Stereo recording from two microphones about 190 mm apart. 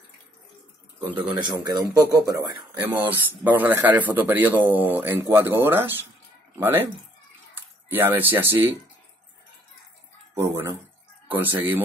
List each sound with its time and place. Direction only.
1.1 s speech: 20° right (ahead or behind)
10.3 s speech: 15° right (ahead or behind)